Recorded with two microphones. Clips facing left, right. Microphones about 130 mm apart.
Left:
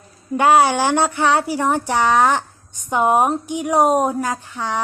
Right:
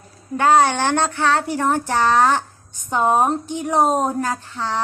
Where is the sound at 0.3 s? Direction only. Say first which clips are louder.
Left 1 dB; 10° left (ahead or behind).